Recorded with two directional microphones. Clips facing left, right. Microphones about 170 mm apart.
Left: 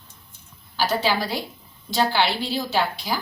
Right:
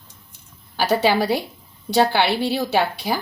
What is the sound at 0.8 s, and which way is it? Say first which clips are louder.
A woman's voice: right 5 dB; 60° right (ahead or behind).